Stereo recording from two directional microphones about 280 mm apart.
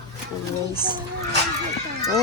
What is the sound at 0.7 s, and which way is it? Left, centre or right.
Speech, centre.